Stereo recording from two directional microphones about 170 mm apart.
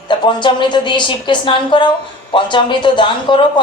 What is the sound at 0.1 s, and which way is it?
A woman's voice, 25° left (ahead or behind).